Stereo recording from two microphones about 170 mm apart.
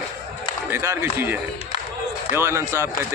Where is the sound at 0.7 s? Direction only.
15° right (ahead or behind).